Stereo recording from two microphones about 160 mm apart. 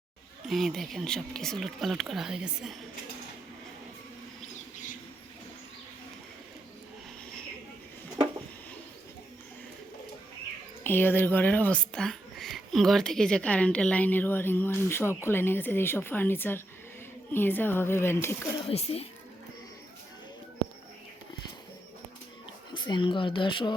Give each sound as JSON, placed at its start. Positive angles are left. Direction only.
{"t": 0.4, "sound": "speech", "side_deg": 0}
{"t": 10.8, "sound": "speech", "side_deg": 15}
{"t": 18.7, "sound": "speech", "side_deg": 40}
{"t": 22.7, "sound": "speech", "side_deg": 30}